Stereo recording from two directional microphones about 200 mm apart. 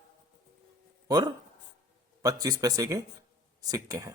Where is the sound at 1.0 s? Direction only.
20° right (ahead or behind).